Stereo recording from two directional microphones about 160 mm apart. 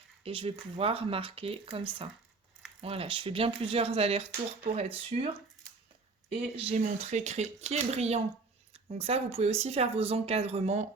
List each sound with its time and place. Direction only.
0.3 s speech: 35° right (ahead or behind)
6.7 s speech: 45° right (ahead or behind)